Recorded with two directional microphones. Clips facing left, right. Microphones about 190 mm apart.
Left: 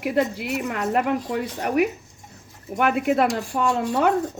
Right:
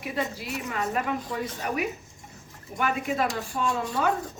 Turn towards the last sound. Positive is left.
turn(degrees=70)  # may be behind; listen again after turning